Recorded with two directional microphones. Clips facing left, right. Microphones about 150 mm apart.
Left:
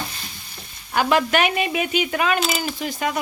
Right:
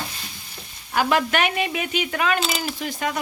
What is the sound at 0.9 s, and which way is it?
Speech, 5° left (ahead or behind).